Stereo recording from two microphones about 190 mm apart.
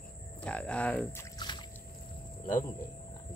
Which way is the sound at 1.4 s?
25° left (ahead or behind).